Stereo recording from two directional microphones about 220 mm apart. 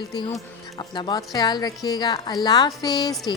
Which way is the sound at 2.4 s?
15° left (ahead or behind).